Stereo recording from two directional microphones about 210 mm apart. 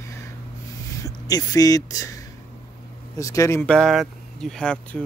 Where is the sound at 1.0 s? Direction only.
15° left (ahead or behind).